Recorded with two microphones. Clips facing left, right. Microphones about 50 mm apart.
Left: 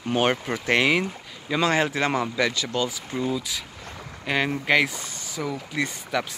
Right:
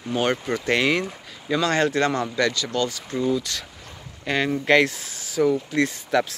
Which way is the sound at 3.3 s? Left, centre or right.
Centre.